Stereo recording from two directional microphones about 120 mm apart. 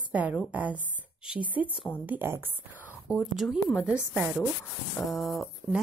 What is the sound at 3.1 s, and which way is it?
Speech, 5° right (ahead or behind).